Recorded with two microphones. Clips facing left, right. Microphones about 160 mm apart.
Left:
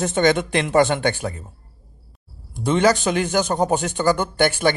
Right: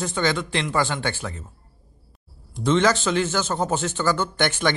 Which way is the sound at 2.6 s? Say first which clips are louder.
Left 2 dB; 15° left (ahead or behind).